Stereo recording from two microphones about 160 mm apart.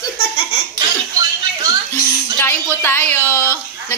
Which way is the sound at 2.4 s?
15° left (ahead or behind).